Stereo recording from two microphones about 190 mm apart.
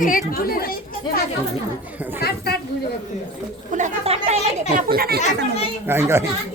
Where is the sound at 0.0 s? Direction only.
45° left (ahead or behind).